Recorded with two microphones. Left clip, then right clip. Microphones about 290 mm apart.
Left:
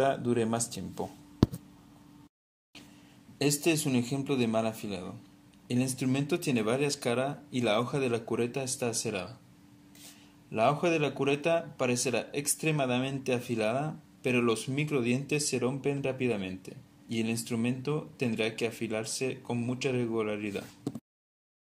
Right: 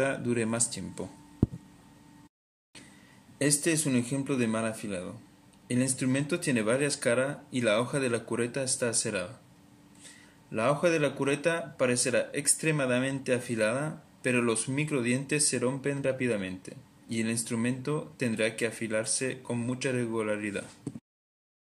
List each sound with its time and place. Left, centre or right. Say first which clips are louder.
0.0 s speech: left 1 dB; centre
1.4 s a sound: left 3 dB; left
3.3 s speech: even; centre
10.5 s speech: right 1 dB; centre